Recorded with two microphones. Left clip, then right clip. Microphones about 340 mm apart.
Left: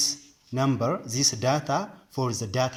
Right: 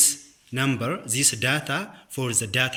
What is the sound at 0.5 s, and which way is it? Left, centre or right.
Speech, centre.